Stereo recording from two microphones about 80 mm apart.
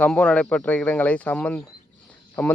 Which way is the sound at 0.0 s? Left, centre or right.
Centre.